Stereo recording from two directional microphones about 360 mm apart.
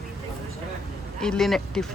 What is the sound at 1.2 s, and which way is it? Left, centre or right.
Speech, centre.